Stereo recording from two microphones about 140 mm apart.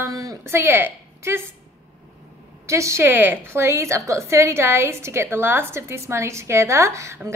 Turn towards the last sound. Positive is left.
turn(degrees=-20)  # may be behind; listen again after turning